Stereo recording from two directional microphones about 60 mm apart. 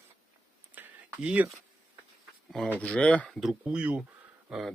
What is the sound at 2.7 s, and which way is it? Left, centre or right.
Speech, centre.